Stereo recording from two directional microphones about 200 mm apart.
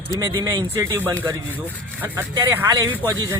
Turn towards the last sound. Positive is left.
turn(degrees=-10)  # may be behind; listen again after turning